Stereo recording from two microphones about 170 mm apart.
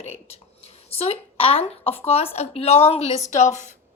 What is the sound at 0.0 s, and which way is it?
A woman's voice, 40° left (ahead or behind).